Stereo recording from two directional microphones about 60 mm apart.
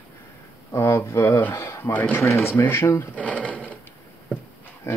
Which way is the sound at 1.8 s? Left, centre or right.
Left.